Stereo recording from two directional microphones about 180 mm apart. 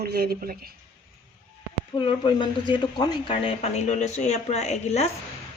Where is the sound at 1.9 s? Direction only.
25° left (ahead or behind).